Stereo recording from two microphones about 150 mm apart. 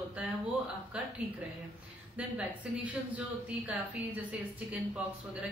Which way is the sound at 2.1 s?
10° right (ahead or behind).